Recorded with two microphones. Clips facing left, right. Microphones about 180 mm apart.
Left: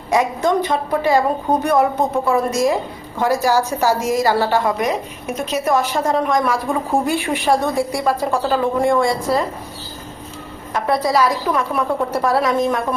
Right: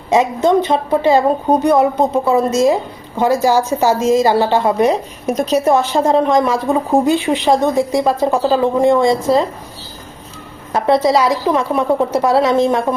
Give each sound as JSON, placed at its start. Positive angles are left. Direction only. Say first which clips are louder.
{"t": 0.1, "sound": "a woman's voice", "louder": "right 4 dB", "side_deg": -20}
{"t": 10.7, "sound": "a woman's voice", "louder": "right 5 dB", "side_deg": -30}